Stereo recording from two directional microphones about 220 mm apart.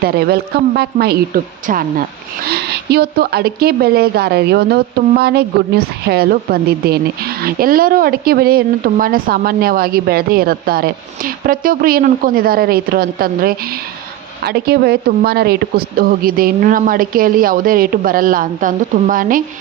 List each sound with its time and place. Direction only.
0.0 s a woman's voice: 45° right (ahead or behind)